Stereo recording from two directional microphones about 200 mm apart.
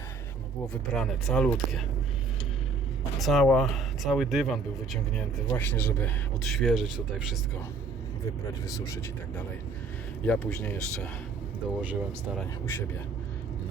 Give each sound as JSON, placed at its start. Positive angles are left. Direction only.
{"t": 0.7, "sound": "speech", "side_deg": 5}
{"t": 3.2, "sound": "speech", "side_deg": 0}
{"t": 8.6, "sound": "speech", "side_deg": 15}
{"t": 11.8, "sound": "speech", "side_deg": -10}
{"t": 12.6, "sound": "speech", "side_deg": 10}